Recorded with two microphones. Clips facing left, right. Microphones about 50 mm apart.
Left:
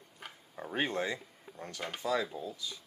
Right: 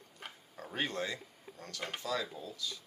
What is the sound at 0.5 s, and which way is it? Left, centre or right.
Speech, centre.